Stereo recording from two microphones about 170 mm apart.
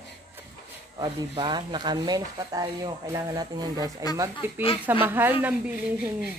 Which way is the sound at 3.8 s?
20° left (ahead or behind).